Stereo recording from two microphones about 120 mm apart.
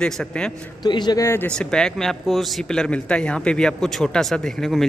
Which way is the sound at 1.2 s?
20° left (ahead or behind).